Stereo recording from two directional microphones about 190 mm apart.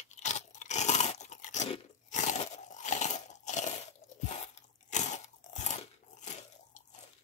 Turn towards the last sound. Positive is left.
turn(degrees=40)  # may be behind; listen again after turning